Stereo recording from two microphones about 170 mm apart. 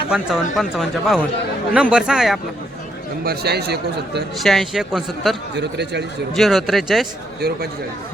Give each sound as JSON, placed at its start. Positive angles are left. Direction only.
{"t": 0.1, "sound": "speech", "side_deg": 0}
{"t": 3.2, "sound": "speech", "side_deg": -70}
{"t": 4.4, "sound": "speech", "side_deg": 0}
{"t": 5.5, "sound": "speech", "side_deg": -85}
{"t": 6.3, "sound": "speech", "side_deg": 0}